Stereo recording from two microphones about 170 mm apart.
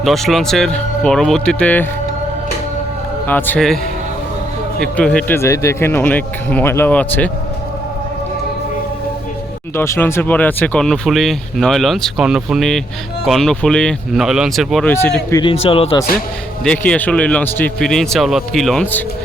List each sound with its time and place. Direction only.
0.0 s speech: centre (ahead or behind)
3.2 s speech: 10° left (ahead or behind)
4.8 s speech: 5° left (ahead or behind)
9.7 s speech: 15° left (ahead or behind)
15.3 s a man's voice: 30° left (ahead or behind)
16.6 s speech: 5° left (ahead or behind)